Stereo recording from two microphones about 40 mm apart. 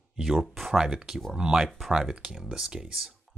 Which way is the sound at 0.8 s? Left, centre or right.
Centre.